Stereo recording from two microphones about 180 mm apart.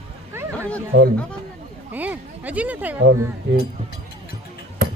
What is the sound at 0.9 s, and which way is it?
Speech, 70° right (ahead or behind).